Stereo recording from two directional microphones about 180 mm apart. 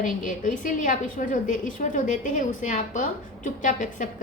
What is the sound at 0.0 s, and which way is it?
A woman's voice, 45° left (ahead or behind).